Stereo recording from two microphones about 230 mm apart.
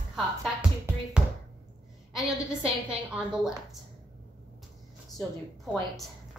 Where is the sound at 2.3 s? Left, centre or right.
Centre.